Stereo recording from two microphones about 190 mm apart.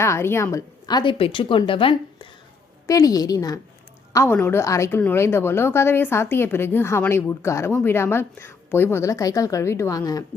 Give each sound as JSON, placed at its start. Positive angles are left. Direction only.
{"t": 0.0, "sound": "a woman's voice", "side_deg": 15}